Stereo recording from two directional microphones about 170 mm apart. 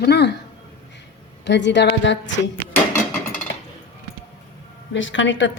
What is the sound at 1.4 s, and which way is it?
Speech, 90° left.